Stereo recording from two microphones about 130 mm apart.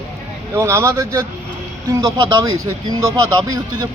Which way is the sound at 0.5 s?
20° right (ahead or behind).